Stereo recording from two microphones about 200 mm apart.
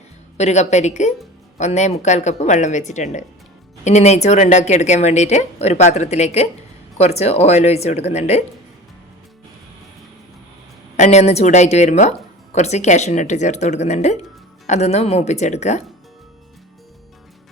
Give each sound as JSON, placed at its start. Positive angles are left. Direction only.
{"t": 0.3, "sound": "speech", "side_deg": 35}
{"t": 10.9, "sound": "speech", "side_deg": 35}